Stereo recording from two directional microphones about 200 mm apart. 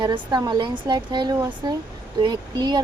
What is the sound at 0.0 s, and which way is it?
A woman's voice, 20° right (ahead or behind).